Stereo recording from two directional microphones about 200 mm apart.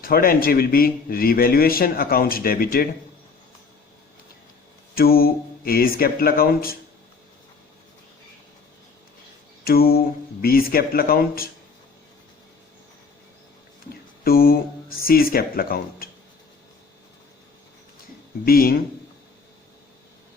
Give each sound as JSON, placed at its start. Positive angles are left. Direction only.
{"t": 0.0, "sound": "a man's voice", "side_deg": 45}
{"t": 4.9, "sound": "a man's voice", "side_deg": 50}
{"t": 9.6, "sound": "a man's voice", "side_deg": 50}
{"t": 13.9, "sound": "speech", "side_deg": 50}
{"t": 18.4, "sound": "a man's voice", "side_deg": 50}